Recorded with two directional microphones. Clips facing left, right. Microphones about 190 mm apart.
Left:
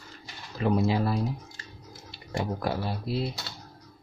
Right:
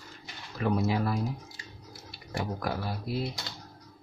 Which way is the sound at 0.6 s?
25° left (ahead or behind).